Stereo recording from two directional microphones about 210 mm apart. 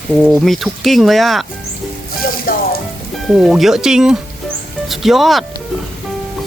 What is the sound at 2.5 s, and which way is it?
Music, 45° left (ahead or behind).